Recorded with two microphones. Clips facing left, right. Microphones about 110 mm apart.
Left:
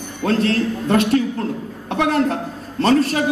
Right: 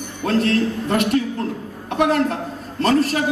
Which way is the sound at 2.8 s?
25° left (ahead or behind).